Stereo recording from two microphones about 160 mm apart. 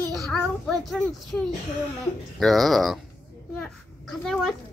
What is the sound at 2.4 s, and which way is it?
Speech, centre (ahead or behind).